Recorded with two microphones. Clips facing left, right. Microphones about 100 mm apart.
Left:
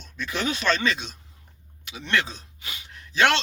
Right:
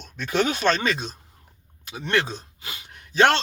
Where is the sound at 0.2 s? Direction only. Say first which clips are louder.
Right 5 dB; 45° right (ahead or behind).